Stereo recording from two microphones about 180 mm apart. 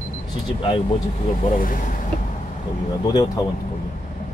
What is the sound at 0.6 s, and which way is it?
Speech, 30° left (ahead or behind).